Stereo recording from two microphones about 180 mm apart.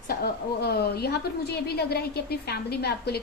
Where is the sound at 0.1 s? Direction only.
60° left (ahead or behind).